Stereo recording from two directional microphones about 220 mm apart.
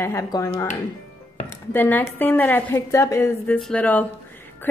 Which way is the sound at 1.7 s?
10° left (ahead or behind).